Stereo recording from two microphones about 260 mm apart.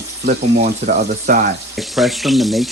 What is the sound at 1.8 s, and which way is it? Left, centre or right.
Speech, centre.